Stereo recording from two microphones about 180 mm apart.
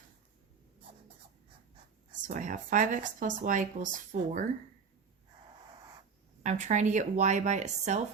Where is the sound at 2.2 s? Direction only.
45° right (ahead or behind).